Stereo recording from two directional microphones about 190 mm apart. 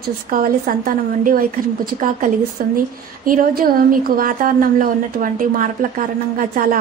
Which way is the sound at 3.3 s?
50° right (ahead or behind).